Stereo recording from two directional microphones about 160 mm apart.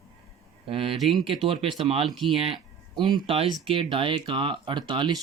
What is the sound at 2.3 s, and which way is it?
Speech, 35° right (ahead or behind).